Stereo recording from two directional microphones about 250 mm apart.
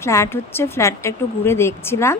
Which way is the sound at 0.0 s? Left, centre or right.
Centre.